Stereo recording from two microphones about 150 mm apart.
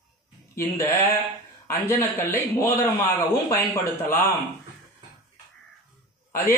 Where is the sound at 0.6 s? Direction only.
20° left (ahead or behind).